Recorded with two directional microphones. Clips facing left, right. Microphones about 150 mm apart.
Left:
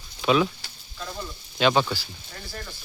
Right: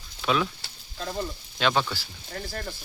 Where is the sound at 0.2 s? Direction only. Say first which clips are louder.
Left 4 dB; 5° left (ahead or behind).